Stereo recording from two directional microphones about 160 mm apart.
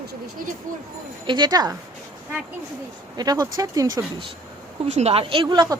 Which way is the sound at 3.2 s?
25° right (ahead or behind).